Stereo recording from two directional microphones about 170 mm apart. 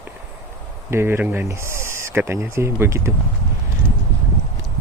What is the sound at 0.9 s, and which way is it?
Speech, 15° right (ahead or behind).